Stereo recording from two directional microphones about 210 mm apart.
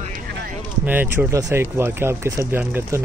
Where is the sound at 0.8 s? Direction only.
10° right (ahead or behind).